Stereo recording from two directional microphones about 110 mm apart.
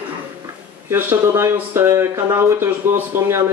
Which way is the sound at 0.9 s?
25° right (ahead or behind).